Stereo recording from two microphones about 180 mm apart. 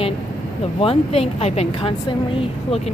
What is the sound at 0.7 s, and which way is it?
Speech, 30° left (ahead or behind).